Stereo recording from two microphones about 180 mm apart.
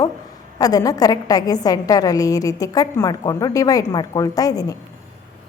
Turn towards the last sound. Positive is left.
turn(degrees=20)  # may be behind; listen again after turning